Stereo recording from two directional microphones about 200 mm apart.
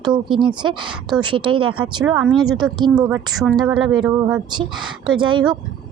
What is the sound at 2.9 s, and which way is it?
Speech, 20° right (ahead or behind).